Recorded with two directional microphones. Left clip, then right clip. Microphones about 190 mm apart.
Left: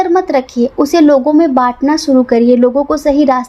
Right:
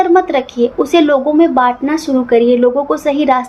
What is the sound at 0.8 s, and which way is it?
A woman's voice, 55° left (ahead or behind).